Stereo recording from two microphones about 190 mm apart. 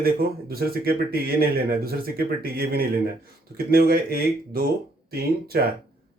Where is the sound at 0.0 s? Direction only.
55° right (ahead or behind).